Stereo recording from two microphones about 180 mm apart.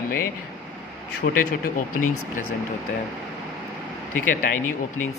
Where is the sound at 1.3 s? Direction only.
50° left (ahead or behind).